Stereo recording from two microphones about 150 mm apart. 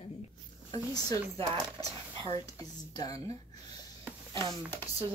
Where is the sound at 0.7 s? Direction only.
25° left (ahead or behind).